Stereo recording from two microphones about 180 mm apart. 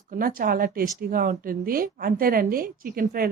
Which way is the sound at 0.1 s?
55° right (ahead or behind).